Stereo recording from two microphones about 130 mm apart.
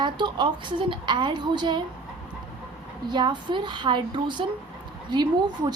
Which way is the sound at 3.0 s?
35° right (ahead or behind).